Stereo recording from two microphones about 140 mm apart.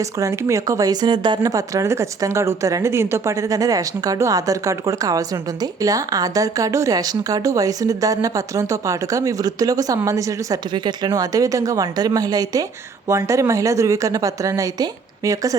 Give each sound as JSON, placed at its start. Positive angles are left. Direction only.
{"t": 0.0, "sound": "speech", "side_deg": -20}